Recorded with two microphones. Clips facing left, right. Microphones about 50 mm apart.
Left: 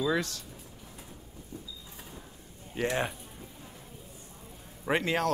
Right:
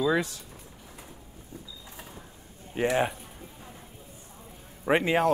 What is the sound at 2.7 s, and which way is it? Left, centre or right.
Speech, centre.